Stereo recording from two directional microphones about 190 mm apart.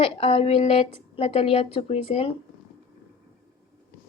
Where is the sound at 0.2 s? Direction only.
30° left (ahead or behind).